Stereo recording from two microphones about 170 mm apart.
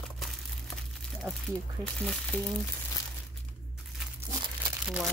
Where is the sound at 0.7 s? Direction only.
Centre (ahead or behind).